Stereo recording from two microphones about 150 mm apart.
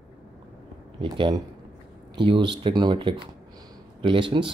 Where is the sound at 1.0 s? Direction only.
35° right (ahead or behind).